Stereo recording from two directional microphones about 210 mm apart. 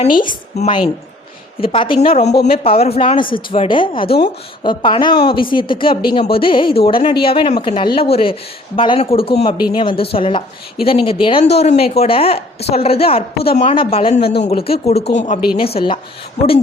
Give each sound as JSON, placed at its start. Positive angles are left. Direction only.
{"t": 0.0, "sound": "a woman's voice", "side_deg": 40}
{"t": 0.3, "sound": "speech", "side_deg": 25}
{"t": 14.2, "sound": "speech", "side_deg": 50}
{"t": 14.4, "sound": "a woman's voice", "side_deg": 25}